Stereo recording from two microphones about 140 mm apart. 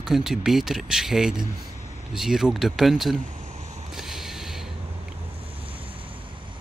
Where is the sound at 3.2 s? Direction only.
55° right (ahead or behind).